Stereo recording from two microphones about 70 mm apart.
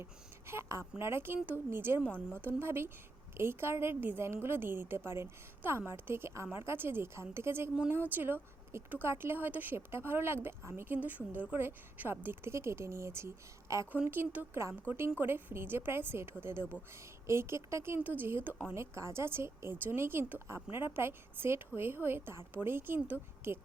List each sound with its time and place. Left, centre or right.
0.0 s a woman's voice: right
2.0 s a woman's voice: centre
2.4 s a woman's voice: right
13.9 s a woman's voice: right
18.0 s speech: right
18.7 s a woman's voice: right